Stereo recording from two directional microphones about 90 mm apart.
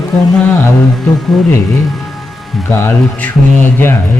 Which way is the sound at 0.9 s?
Centre (ahead or behind).